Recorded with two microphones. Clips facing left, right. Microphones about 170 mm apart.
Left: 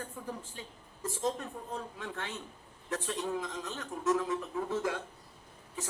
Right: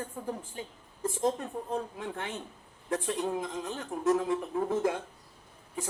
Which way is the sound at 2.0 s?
25° right (ahead or behind).